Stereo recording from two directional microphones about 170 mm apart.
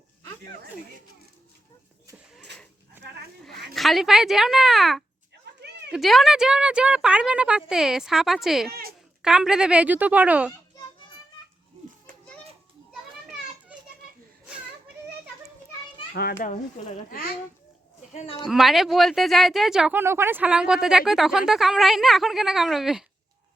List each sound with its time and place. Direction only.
2.1 s a sound: centre (ahead or behind)
3.0 s goat: 15° right (ahead or behind)
3.8 s speech: centre (ahead or behind)
5.5 s a sound: 80° right
5.9 s a woman's voice: centre (ahead or behind)
16.1 s a child's voice: 65° left (ahead or behind)
16.5 s a child's voice: 50° left (ahead or behind)
18.1 s speech: 40° left (ahead or behind)
18.4 s speech: centre (ahead or behind)